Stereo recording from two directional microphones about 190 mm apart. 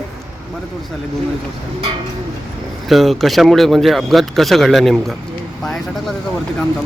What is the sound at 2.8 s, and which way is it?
Speech, centre (ahead or behind).